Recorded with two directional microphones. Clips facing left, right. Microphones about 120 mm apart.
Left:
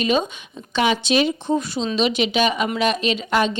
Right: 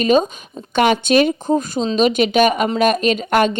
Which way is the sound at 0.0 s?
40° right (ahead or behind).